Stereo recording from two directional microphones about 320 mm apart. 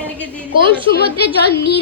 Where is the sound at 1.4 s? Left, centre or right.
Left.